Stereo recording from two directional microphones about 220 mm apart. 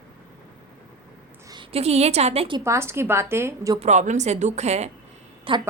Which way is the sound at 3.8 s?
35° right (ahead or behind).